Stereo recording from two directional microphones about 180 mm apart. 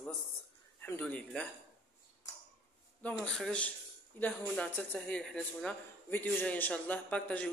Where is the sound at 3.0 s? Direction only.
5° left (ahead or behind).